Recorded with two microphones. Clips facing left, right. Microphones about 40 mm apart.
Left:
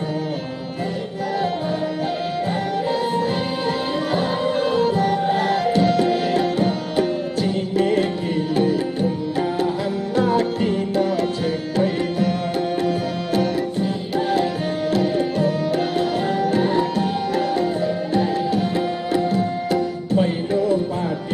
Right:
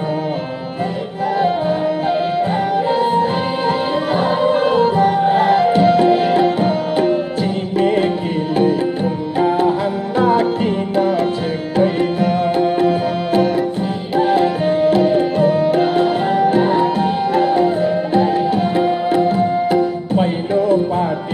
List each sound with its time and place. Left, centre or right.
2.9 s music: centre
9.4 s music: right
11.7 s tabla: right